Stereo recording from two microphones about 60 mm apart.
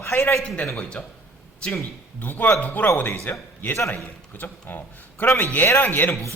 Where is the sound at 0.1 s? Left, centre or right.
Left.